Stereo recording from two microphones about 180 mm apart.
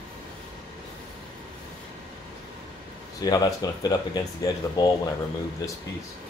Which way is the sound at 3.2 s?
20° left (ahead or behind).